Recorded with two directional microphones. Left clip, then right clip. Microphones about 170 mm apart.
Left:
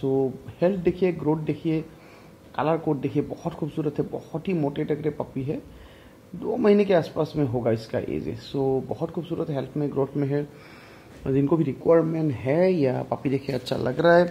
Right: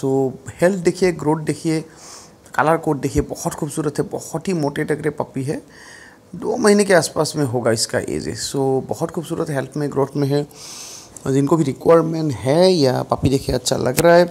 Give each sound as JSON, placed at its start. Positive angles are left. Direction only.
{"t": 0.0, "sound": "speech", "side_deg": -25}
{"t": 11.2, "sound": "speech", "side_deg": -20}